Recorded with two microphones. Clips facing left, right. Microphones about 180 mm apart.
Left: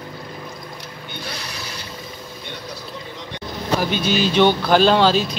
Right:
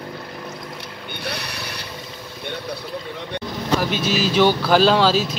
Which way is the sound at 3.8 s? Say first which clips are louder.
Left 1 dB; centre (ahead or behind).